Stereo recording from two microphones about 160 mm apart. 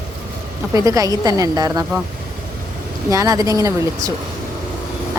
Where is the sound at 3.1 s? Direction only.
20° right (ahead or behind).